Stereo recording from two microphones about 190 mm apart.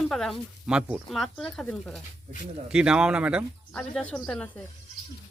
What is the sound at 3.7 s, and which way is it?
Speech, 5° left (ahead or behind).